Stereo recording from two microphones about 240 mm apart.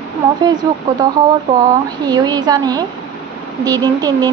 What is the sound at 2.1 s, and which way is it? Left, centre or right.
A woman's voice, centre.